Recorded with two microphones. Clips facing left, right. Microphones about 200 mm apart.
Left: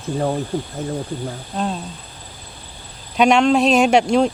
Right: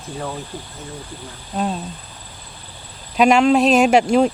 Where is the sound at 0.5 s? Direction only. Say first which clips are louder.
Left 10 dB; 50° left (ahead or behind).